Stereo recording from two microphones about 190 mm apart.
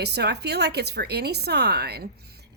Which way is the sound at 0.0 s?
60° right (ahead or behind).